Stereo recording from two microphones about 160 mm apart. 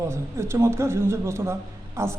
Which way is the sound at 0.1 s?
15° right (ahead or behind).